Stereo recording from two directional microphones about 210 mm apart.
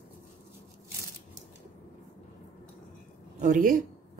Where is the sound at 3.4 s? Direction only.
40° right (ahead or behind).